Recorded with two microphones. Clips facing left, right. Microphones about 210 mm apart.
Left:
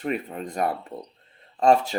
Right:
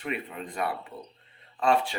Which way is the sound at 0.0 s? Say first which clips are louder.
Left 6 dB; 40° left (ahead or behind).